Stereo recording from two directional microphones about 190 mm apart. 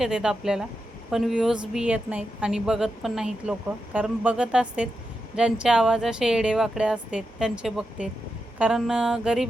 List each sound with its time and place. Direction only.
0.0 s speech: 5° right (ahead or behind)